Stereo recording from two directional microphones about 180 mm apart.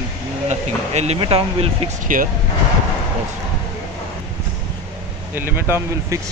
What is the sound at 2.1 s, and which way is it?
Speech, 50° right (ahead or behind).